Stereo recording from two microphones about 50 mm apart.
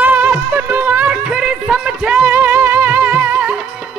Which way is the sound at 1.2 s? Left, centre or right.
Centre.